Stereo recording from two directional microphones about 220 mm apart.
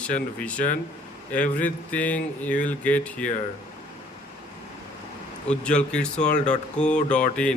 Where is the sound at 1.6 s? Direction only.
5° left (ahead or behind).